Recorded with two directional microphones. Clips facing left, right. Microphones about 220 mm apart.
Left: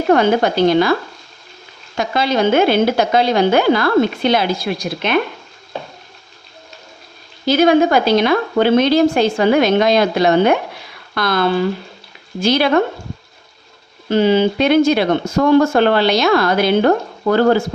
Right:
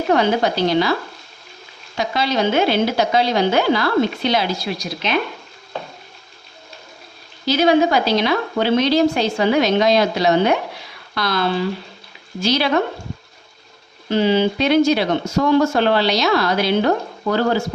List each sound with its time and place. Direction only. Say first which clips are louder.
0.1 s speech: left 4 dB; 50° left (ahead or behind)
2.0 s speech: left 3 dB; 50° left (ahead or behind)
7.4 s speech: left 3 dB; 50° left (ahead or behind)
14.1 s speech: left 3 dB; 50° left (ahead or behind)